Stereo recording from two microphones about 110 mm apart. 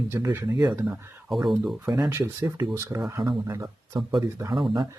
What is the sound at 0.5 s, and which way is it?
Speech, 35° right (ahead or behind).